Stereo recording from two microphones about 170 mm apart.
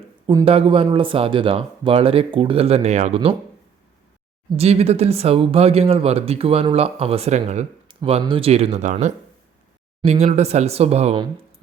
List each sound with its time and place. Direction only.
0.4 s speech: 35° right (ahead or behind)
4.5 s speech: 35° right (ahead or behind)
7.9 s speech: 30° right (ahead or behind)